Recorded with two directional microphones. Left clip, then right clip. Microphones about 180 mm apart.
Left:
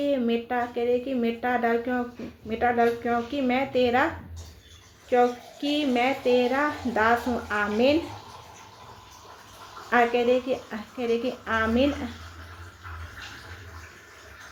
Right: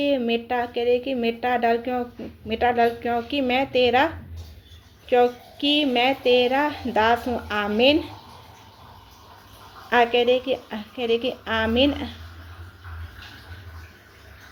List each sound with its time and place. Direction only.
0.0 s a woman's voice: 35° right (ahead or behind)
5.0 s a woman's voice: 35° right (ahead or behind)
9.9 s a woman's voice: 35° right (ahead or behind)